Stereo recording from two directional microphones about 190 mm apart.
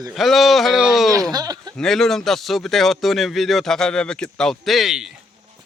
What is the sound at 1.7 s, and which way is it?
Speech, centre (ahead or behind).